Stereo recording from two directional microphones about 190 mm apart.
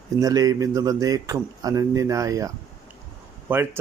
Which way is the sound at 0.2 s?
20° right (ahead or behind).